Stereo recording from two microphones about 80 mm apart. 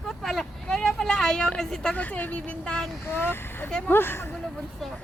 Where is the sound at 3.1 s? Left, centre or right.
Left.